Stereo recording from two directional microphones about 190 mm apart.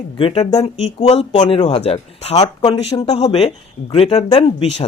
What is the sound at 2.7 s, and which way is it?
Speech, 20° left (ahead or behind).